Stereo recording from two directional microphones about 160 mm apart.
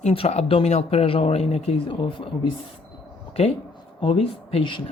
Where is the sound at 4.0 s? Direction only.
35° left (ahead or behind).